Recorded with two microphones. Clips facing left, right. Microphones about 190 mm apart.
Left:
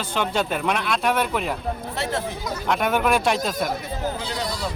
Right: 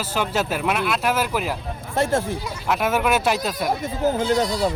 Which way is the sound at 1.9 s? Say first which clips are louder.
Right 9 dB; 45° right (ahead or behind).